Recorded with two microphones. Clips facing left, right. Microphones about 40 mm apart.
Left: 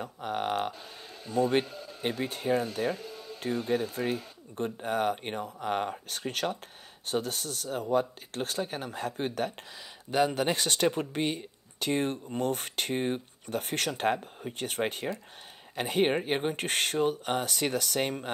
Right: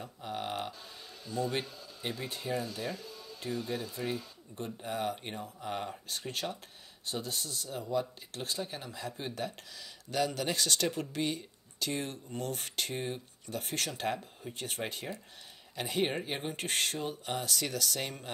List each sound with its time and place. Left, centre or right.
0.0 s speech: left
10.1 s speech: left